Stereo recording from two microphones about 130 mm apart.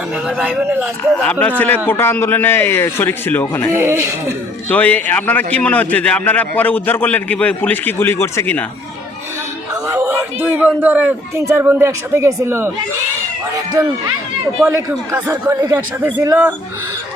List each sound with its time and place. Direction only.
0.3 s speech: 10° right (ahead or behind)
1.2 s a man's voice: 10° left (ahead or behind)
3.7 s a woman's voice: 20° right (ahead or behind)
4.7 s a man's voice: 10° left (ahead or behind)
9.8 s a man's voice: 20° right (ahead or behind)
14.8 s a woman's voice: 20° right (ahead or behind)